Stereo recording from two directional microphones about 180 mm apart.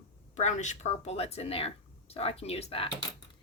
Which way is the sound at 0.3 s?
40° left (ahead or behind).